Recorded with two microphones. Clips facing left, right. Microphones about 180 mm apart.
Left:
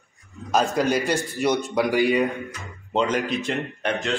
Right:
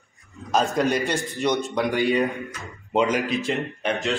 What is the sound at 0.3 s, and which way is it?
A man's voice, centre (ahead or behind).